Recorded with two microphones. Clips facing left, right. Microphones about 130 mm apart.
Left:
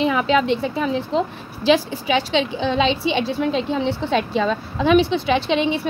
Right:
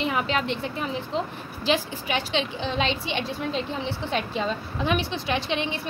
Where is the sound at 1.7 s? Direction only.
90° left.